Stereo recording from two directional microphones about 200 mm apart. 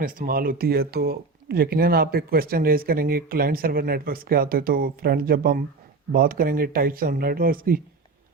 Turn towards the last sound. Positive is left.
turn(degrees=-45)  # may be behind; listen again after turning